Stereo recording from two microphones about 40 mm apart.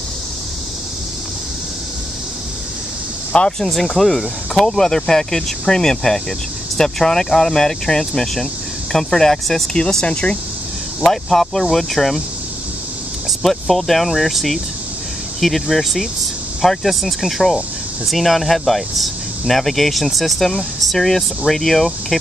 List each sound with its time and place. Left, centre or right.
3.5 s speech: centre
10.0 s speech: left
11.0 s speech: centre
13.4 s speech: centre